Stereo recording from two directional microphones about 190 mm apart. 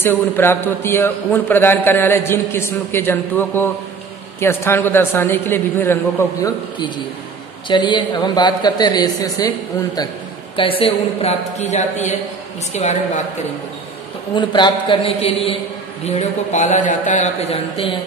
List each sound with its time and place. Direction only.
0.0 s a man's voice: 10° left (ahead or behind)
7.6 s a man's voice: 25° left (ahead or behind)
10.5 s a man's voice: 30° left (ahead or behind)
14.3 s a man's voice: 25° left (ahead or behind)